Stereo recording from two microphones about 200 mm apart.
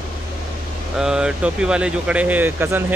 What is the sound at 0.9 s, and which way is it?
Speech, 5° right (ahead or behind).